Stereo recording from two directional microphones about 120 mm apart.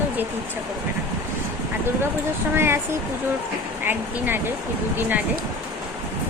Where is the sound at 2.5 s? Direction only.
20° right (ahead or behind).